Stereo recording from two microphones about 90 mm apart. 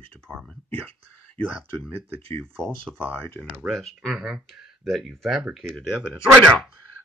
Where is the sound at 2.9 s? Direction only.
5° left (ahead or behind).